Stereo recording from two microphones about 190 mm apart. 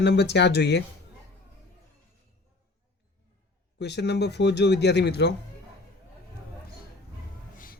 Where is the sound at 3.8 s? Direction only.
65° left (ahead or behind).